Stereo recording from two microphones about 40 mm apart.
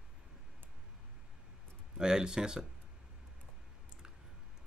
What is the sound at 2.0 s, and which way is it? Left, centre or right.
Speech, centre.